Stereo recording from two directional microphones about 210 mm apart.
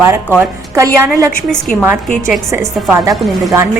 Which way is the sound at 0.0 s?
10° right (ahead or behind).